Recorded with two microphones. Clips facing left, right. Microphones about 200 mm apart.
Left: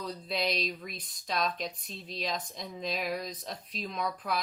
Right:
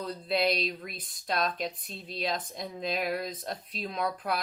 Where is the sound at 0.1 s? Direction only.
Centre (ahead or behind).